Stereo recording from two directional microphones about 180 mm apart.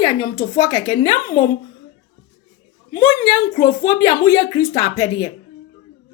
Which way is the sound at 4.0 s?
25° left (ahead or behind).